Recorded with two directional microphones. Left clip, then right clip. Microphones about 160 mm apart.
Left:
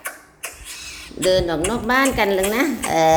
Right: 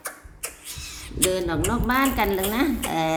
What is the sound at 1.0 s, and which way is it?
Speech, 15° right (ahead or behind).